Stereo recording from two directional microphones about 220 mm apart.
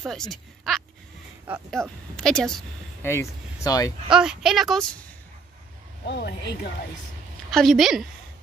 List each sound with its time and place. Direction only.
0.0 s speech: centre (ahead or behind)
4.1 s speech: 5° right (ahead or behind)
6.0 s a woman's voice: 50° left (ahead or behind)
7.5 s speech: centre (ahead or behind)